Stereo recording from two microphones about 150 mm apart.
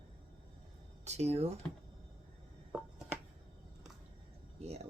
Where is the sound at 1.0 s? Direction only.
45° right (ahead or behind).